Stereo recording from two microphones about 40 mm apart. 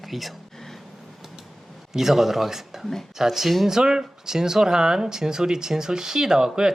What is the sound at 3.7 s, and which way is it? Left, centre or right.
Speech, centre.